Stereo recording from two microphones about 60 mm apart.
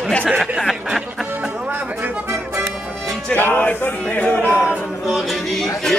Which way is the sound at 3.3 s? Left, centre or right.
Left.